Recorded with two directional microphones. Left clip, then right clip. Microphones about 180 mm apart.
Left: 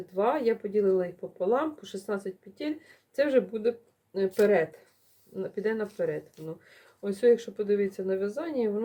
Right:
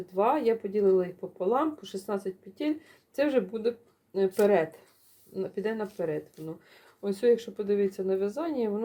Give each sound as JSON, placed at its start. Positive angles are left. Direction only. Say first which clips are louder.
{"t": 0.1, "sound": "speech", "louder": "right 1 dB", "side_deg": -10}